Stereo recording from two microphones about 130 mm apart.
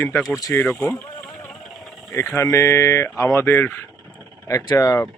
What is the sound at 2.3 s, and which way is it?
Speech, 20° left (ahead or behind).